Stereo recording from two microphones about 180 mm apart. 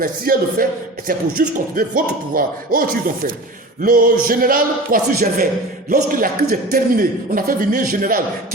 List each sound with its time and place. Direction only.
0.0 s a man's voice: 50° right (ahead or behind)